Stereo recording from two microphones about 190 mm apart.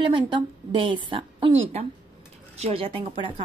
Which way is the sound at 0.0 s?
25° right (ahead or behind).